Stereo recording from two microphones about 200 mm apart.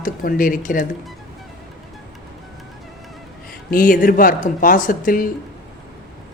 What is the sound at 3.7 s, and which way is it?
Speech, 45° left (ahead or behind).